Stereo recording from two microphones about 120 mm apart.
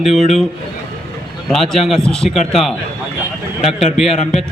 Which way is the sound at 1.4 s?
Centre (ahead or behind).